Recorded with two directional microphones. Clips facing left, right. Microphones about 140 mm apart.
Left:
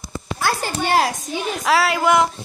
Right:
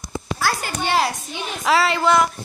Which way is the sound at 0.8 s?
45° left (ahead or behind).